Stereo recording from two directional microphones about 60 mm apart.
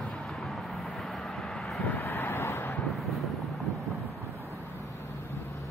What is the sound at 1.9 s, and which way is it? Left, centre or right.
Vehicle, left.